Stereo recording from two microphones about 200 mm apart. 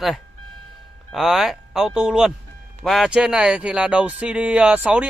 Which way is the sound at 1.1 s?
Centre (ahead or behind).